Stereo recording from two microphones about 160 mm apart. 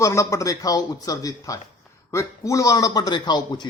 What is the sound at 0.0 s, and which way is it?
A man's voice, 20° left (ahead or behind).